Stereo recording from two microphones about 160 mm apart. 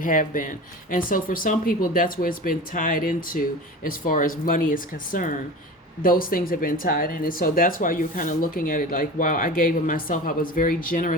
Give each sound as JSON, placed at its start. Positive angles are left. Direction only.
{"t": 0.0, "sound": "speech", "side_deg": 55}